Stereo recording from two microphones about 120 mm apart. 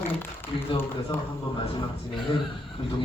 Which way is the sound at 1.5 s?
45° left (ahead or behind).